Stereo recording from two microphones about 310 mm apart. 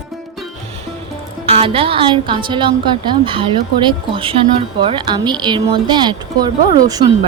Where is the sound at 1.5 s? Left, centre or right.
Centre.